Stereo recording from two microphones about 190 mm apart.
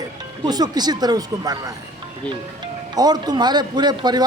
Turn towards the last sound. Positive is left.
turn(degrees=-20)  # may be behind; listen again after turning